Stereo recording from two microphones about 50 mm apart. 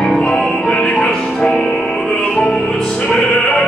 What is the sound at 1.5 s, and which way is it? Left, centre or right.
Music, centre.